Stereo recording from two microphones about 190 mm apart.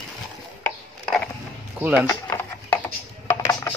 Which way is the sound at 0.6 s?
5° left (ahead or behind).